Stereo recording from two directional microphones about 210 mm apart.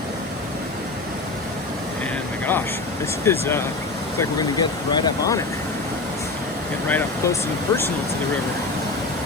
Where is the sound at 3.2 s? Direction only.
10° left (ahead or behind).